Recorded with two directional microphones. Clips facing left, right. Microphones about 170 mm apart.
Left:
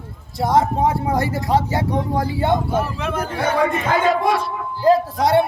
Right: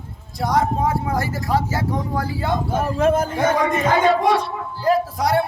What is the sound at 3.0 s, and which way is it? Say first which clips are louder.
Speech: right 5 dB; 45° right (ahead or behind).